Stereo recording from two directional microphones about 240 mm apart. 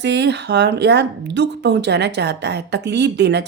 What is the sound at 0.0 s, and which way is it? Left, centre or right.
A woman's voice, right.